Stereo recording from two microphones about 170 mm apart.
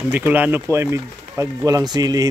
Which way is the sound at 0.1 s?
10° right (ahead or behind).